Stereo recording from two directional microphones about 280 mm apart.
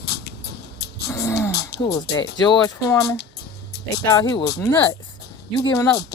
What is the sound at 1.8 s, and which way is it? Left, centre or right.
Speech, centre.